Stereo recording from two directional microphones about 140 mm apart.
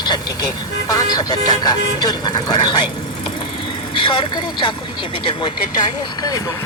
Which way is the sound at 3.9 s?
35° left (ahead or behind).